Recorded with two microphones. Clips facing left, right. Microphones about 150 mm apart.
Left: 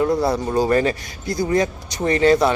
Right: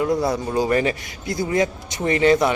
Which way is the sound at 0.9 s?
20° right (ahead or behind).